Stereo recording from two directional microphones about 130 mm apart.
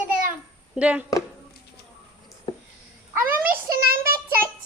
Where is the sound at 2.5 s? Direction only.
35° left (ahead or behind).